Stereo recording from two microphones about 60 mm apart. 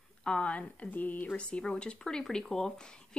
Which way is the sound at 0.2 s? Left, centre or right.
Centre.